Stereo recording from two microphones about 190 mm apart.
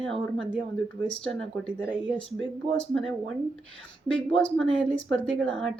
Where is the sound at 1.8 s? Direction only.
5° right (ahead or behind).